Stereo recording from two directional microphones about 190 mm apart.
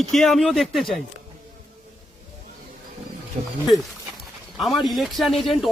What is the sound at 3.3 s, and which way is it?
Speech, 45° right (ahead or behind).